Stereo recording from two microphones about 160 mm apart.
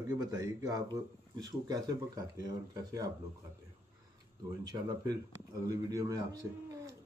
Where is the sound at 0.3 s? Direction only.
25° right (ahead or behind).